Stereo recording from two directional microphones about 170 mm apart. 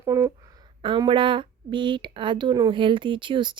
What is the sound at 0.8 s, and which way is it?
A woman's voice, 30° right (ahead or behind).